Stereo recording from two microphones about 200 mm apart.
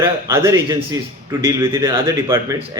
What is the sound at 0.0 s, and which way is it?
Speech, 10° right (ahead or behind).